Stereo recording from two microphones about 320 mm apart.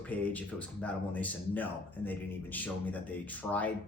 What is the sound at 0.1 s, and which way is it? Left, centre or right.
Speech, centre.